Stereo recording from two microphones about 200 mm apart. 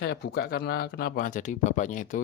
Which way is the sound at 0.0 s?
55° left (ahead or behind).